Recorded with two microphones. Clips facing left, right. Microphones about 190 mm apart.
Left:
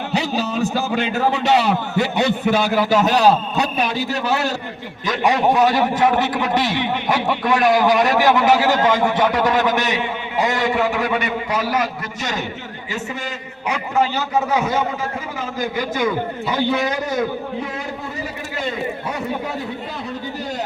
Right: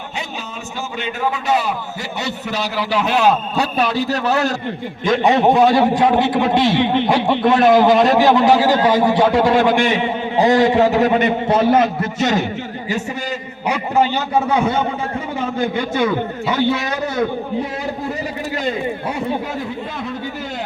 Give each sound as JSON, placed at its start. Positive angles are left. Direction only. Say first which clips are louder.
{"t": 0.3, "sound": "speech", "louder": "left 8 dB", "side_deg": 35}
{"t": 1.3, "sound": "a man's voice", "louder": "left 2 dB", "side_deg": 75}
{"t": 5.0, "sound": "a man's voice", "louder": "right 4 dB", "side_deg": -20}
{"t": 11.9, "sound": "a man's voice", "louder": "right 9 dB", "side_deg": -50}
{"t": 13.7, "sound": "a man's voice", "louder": "right 3 dB", "side_deg": -30}